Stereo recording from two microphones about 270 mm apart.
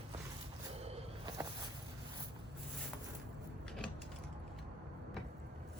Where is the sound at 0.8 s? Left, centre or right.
Centre.